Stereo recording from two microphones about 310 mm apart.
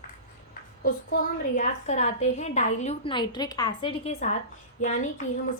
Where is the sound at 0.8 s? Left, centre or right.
Left.